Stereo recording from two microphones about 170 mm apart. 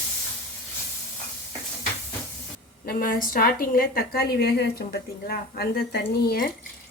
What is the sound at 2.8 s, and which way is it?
A woman's voice, 55° left (ahead or behind).